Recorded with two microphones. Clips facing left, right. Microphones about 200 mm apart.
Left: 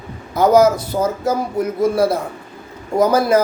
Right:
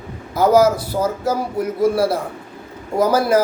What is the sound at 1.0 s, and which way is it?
Speech, 20° left (ahead or behind).